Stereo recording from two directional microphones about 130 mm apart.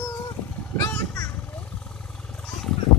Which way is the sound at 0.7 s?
20° left (ahead or behind).